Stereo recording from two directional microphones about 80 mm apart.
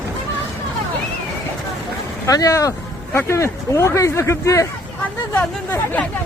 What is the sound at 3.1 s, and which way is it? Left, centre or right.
Speech, left.